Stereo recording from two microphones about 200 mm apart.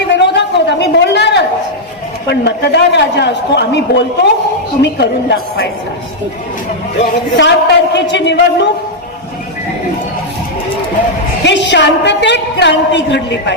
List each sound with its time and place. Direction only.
0.1 s a sound: 60° left (ahead or behind)
2.2 s a woman's voice: 60° left (ahead or behind)
7.3 s a woman's voice: 60° left (ahead or behind)
11.4 s a woman's voice: 60° left (ahead or behind)